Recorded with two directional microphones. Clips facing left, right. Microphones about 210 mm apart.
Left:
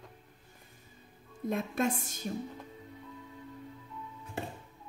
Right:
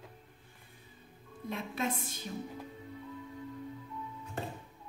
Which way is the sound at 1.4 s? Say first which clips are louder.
Left 5 dB; 45° left (ahead or behind).